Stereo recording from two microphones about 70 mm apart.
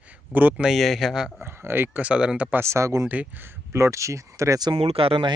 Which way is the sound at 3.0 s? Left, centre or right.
Right.